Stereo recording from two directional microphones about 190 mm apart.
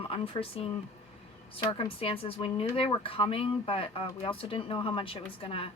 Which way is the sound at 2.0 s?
30° left (ahead or behind).